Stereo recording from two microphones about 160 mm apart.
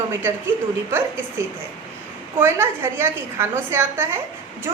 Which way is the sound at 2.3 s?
15° right (ahead or behind).